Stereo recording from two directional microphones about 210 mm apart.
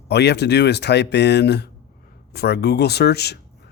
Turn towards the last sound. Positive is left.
turn(degrees=50)  # may be behind; listen again after turning